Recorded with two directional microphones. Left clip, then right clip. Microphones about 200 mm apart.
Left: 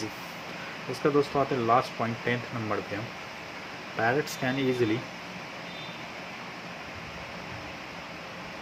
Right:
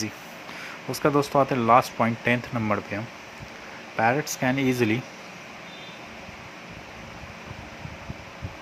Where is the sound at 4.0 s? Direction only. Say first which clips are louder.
Right 4 dB; 50° right (ahead or behind).